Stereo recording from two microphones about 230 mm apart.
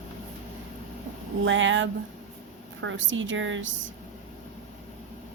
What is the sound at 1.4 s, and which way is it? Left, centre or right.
A woman's voice, right.